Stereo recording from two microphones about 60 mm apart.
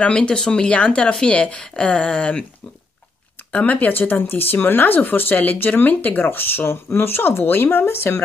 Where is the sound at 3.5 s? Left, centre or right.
Left.